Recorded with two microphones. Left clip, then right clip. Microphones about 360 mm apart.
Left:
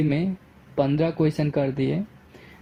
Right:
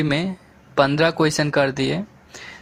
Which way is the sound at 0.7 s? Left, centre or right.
Right.